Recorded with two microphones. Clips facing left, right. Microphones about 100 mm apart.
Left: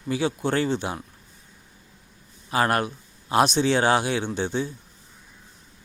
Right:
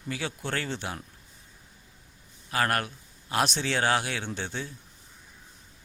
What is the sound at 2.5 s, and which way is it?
A man's voice, 20° left (ahead or behind).